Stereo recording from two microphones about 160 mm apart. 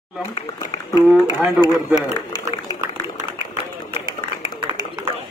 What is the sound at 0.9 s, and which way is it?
Speech, 15° right (ahead or behind).